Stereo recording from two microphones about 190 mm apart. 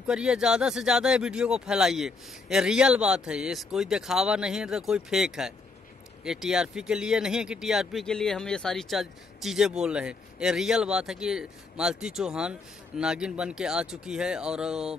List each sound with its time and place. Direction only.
0.0 s speech: 5° right (ahead or behind)